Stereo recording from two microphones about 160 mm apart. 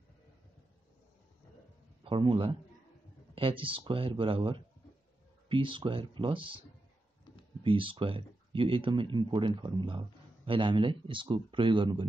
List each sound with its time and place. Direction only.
2.0 s speech: 30° right (ahead or behind)
7.6 s speech: 30° right (ahead or behind)